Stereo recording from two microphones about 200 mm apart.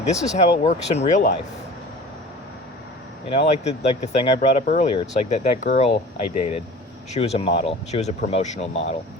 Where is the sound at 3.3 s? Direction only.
30° left (ahead or behind).